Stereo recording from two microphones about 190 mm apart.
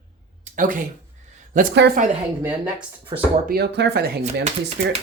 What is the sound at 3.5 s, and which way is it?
Speech, 60° right (ahead or behind).